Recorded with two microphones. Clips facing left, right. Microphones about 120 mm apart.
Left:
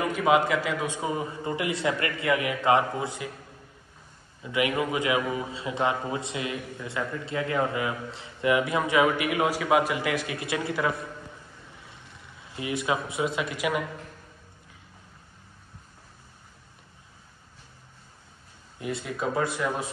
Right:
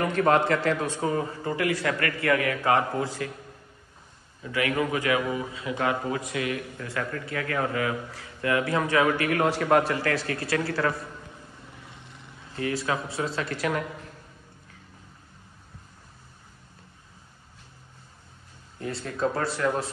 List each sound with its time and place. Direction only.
0.0 s a man's voice: 10° left (ahead or behind)
4.4 s a man's voice: 20° left (ahead or behind)
12.5 s speech: 15° left (ahead or behind)
18.8 s speech: 15° left (ahead or behind)